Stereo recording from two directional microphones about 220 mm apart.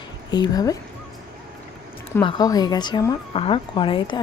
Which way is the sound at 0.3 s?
20° left (ahead or behind).